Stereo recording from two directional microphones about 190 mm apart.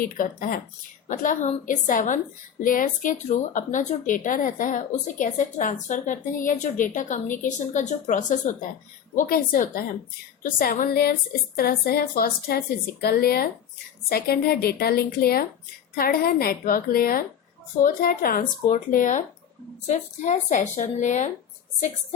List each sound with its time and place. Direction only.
0.0 s a woman's voice: 45° left (ahead or behind)